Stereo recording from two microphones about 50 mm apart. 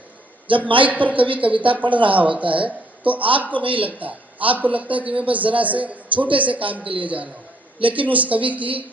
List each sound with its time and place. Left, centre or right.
0.6 s a man's voice: right